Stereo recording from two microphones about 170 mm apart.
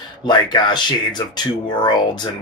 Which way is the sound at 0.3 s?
25° left (ahead or behind).